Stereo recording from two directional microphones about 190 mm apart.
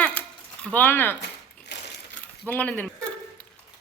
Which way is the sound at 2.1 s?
10° left (ahead or behind).